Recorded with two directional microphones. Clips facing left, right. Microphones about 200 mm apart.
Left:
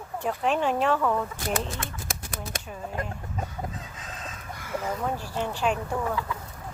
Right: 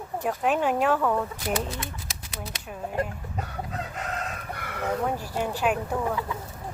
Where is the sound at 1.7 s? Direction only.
50° left (ahead or behind).